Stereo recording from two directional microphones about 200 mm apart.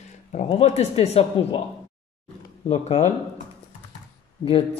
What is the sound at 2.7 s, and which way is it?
Speech, 35° left (ahead or behind).